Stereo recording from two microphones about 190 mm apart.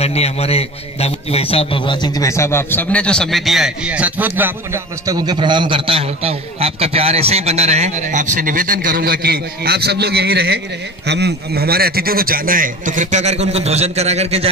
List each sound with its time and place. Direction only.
0.0 s a man's voice: 35° left (ahead or behind); by 14.5 s 35° right (ahead or behind)